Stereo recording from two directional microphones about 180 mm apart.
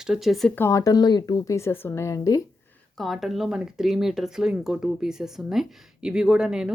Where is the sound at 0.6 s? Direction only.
15° left (ahead or behind).